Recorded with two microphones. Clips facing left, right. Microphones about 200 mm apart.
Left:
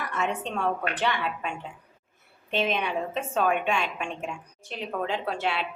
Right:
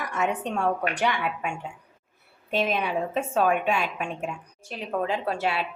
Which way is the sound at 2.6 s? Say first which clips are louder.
Right 1 dB; 5° right (ahead or behind).